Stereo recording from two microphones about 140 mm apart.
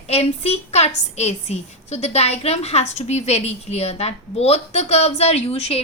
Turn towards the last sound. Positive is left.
turn(degrees=45)  # may be behind; listen again after turning